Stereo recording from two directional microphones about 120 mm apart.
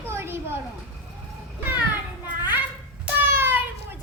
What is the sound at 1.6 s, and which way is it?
Children playing, 15° right (ahead or behind).